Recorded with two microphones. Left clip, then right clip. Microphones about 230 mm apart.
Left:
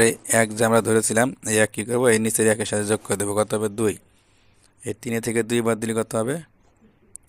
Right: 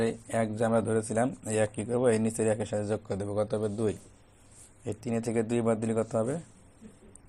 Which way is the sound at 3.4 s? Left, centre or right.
Left.